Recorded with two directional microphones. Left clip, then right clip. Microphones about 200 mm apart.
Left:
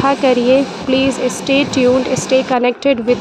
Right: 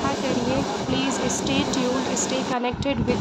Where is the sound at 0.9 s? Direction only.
30° left (ahead or behind).